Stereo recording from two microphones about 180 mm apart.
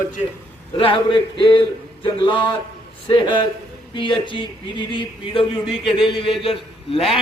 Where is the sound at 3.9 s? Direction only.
25° left (ahead or behind).